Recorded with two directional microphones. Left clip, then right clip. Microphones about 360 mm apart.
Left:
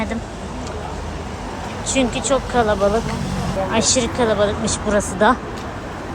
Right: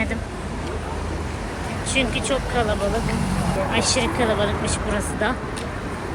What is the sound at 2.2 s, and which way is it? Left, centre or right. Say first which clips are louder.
Speech: left 5 dB; centre.